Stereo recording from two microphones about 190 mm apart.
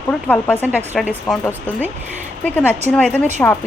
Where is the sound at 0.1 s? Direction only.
10° left (ahead or behind).